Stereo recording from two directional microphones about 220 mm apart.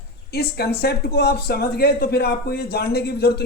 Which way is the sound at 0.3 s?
45° left (ahead or behind).